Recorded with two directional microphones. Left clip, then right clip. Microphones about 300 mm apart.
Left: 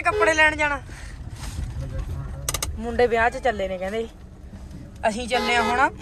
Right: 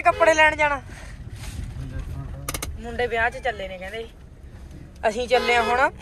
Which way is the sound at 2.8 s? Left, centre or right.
Centre.